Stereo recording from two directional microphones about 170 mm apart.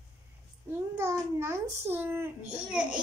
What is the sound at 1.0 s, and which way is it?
A woman's voice, 15° right (ahead or behind).